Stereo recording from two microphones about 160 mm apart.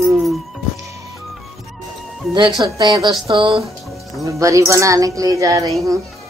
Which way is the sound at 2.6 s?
25° right (ahead or behind).